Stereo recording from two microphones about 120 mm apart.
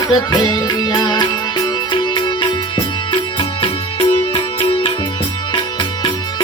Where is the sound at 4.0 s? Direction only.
50° left (ahead or behind).